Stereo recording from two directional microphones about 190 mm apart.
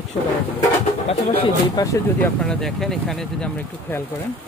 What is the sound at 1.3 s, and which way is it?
Speech, 30° left (ahead or behind).